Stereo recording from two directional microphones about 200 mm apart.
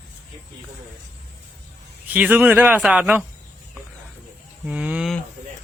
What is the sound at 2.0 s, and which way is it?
Speech, 10° right (ahead or behind).